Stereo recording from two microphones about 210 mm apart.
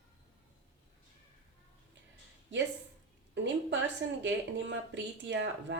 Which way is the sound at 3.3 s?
60° right (ahead or behind).